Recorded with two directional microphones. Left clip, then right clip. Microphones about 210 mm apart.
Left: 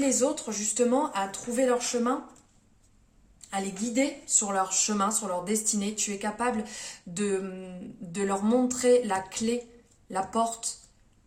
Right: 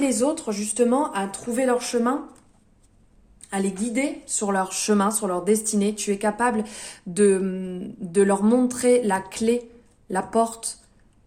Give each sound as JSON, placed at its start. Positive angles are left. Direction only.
{"t": 0.0, "sound": "a woman's voice", "side_deg": -35}
{"t": 3.5, "sound": "a woman's voice", "side_deg": -45}